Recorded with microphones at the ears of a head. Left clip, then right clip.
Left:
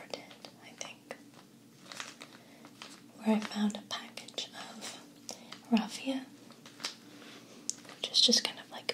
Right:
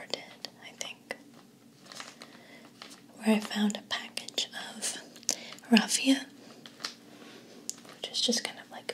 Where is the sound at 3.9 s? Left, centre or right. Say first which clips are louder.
Right 6 dB; right.